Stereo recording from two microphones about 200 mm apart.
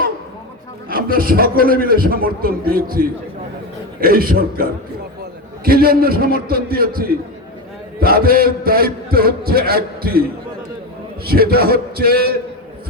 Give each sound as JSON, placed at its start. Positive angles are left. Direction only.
{"t": 0.9, "sound": "a man's voice", "side_deg": -45}
{"t": 11.3, "sound": "a man's voice", "side_deg": -50}